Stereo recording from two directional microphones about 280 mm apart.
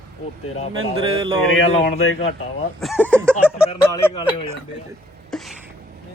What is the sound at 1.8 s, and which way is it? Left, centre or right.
Speech, left.